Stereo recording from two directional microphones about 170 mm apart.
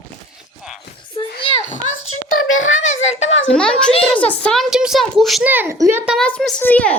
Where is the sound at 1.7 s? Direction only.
45° left (ahead or behind).